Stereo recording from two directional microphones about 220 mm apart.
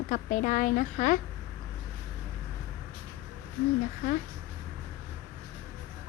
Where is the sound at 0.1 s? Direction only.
35° left (ahead or behind).